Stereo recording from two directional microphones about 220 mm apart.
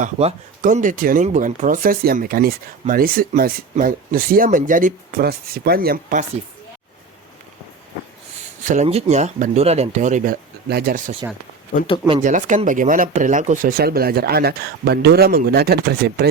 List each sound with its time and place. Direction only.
0.0 s speech: 30° right (ahead or behind)
8.6 s speech: 35° right (ahead or behind)
12.2 s speech: 35° right (ahead or behind)